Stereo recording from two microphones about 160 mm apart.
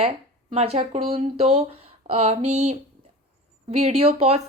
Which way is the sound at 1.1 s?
45° right (ahead or behind).